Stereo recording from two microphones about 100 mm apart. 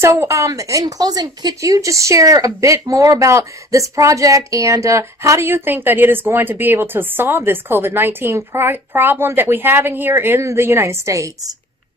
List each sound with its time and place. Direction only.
0.0 s a woman's voice: 30° right (ahead or behind)